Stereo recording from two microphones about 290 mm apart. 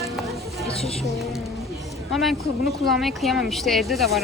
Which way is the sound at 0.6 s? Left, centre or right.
Left.